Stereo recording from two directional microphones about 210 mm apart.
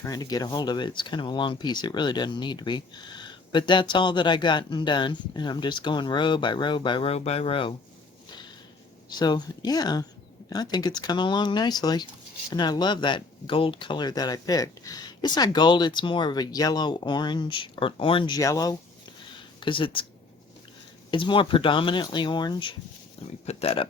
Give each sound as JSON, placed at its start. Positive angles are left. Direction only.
{"t": 0.0, "sound": "speech", "side_deg": 20}
{"t": 9.0, "sound": "speech", "side_deg": 20}
{"t": 21.1, "sound": "speech", "side_deg": 25}